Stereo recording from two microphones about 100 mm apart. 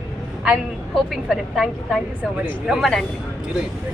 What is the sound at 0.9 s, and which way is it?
A woman's voice, centre (ahead or behind).